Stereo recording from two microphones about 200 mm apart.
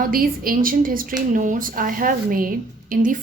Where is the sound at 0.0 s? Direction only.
45° right (ahead or behind).